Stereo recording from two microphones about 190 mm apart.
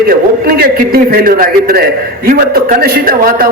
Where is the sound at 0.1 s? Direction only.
50° right (ahead or behind).